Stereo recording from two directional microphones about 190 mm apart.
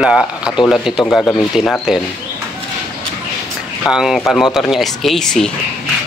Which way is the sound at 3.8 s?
5° right (ahead or behind).